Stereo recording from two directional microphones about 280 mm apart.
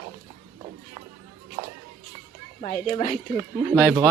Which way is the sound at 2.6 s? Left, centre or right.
Left.